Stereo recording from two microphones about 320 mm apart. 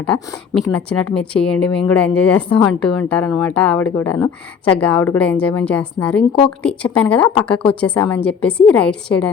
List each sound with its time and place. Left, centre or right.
0.0 s speech: centre